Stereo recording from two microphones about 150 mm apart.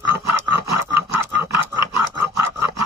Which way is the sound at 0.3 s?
20° right (ahead or behind).